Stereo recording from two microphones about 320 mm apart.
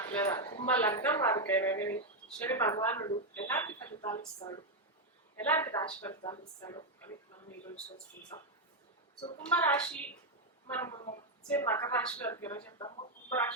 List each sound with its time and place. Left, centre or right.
0.0 s speech: centre
8.3 s a woman's voice: centre